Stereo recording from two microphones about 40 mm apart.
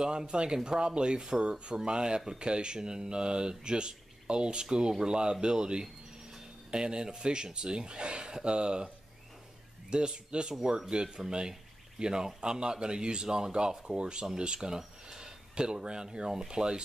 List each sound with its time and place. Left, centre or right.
0.0 s speech: centre